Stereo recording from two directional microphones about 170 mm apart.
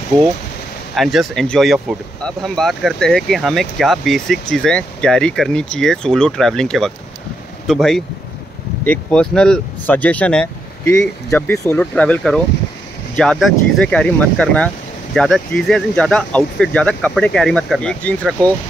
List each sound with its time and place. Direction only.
0.1 s speech: 25° right (ahead or behind)
0.9 s speech: centre (ahead or behind)